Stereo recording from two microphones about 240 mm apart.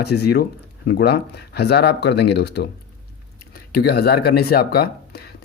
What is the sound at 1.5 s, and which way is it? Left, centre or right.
Speech, left.